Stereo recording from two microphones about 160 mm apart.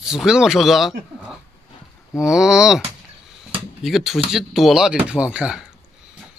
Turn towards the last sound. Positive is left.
turn(degrees=-5)  # may be behind; listen again after turning